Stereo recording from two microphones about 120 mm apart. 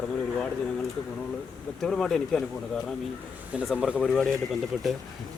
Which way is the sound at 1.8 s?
5° left (ahead or behind).